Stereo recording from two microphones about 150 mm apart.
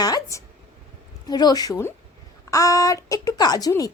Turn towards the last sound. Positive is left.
turn(degrees=25)  # may be behind; listen again after turning